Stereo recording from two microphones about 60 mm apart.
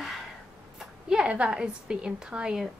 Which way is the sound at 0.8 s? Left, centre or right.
Centre.